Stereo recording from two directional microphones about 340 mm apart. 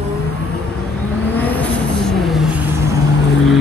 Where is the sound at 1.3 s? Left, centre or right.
Centre.